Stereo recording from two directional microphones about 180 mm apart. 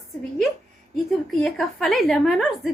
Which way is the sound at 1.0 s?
Centre (ahead or behind).